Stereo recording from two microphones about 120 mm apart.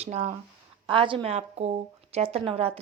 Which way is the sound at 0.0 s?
65° right (ahead or behind).